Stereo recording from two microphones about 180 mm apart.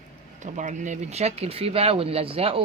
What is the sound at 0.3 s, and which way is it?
Speech, 40° right (ahead or behind).